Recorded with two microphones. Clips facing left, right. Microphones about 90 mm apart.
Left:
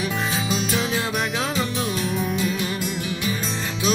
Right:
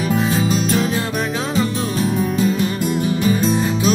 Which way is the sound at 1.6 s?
35° right (ahead or behind).